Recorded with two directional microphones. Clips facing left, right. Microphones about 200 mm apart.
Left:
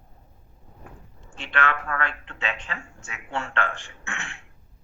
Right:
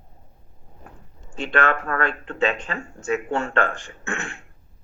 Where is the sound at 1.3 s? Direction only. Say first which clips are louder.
Right 5 dB; 40° right (ahead or behind).